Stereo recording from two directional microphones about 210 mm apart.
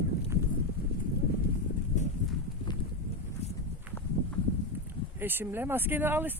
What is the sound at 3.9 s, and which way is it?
Walk, 10° right (ahead or behind).